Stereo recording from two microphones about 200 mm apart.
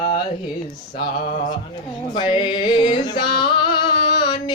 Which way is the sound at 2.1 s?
25° left (ahead or behind).